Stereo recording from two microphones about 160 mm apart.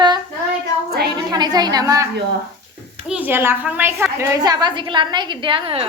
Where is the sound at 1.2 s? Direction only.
25° right (ahead or behind).